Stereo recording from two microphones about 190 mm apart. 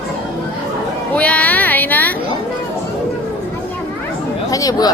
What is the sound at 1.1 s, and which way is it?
Speech, 5° left (ahead or behind).